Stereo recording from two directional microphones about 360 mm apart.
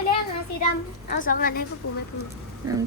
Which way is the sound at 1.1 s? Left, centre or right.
Left.